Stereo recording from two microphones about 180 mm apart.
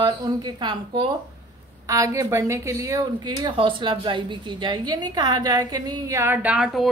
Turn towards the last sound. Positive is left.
turn(degrees=-5)  # may be behind; listen again after turning